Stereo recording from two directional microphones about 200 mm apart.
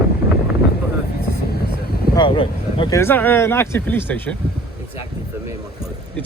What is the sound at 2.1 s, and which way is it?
Speech, 25° left (ahead or behind).